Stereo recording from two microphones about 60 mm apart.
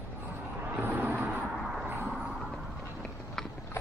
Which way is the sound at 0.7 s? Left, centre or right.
Right.